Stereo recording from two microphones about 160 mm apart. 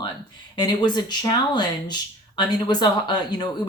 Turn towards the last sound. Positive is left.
turn(degrees=25)  # may be behind; listen again after turning